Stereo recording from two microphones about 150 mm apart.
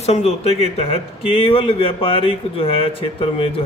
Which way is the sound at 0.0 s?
45° left (ahead or behind).